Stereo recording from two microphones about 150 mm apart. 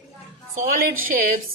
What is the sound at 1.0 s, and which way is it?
Speech, 70° right (ahead or behind).